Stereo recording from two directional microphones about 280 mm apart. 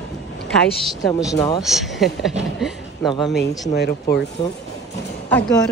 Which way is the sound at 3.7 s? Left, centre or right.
Left.